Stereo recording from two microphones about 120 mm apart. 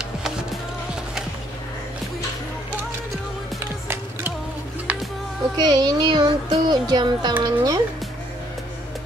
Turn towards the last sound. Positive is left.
turn(degrees=-40)  # may be behind; listen again after turning